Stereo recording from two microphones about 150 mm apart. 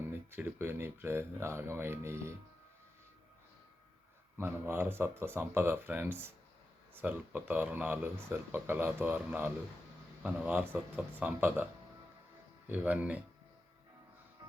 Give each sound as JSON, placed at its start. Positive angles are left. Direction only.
{"t": 0.3, "sound": "speech", "side_deg": -15}
{"t": 4.4, "sound": "speech", "side_deg": -15}
{"t": 12.6, "sound": "speech", "side_deg": -10}